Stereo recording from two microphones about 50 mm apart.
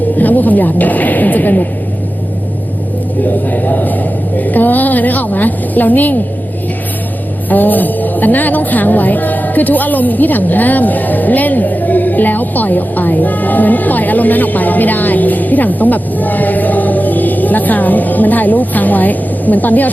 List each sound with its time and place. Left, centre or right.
0.2 s speech: left
3.4 s speech: left
7.5 s speech: left